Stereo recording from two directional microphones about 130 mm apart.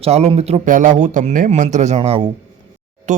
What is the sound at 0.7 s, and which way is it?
Speech, 90° right.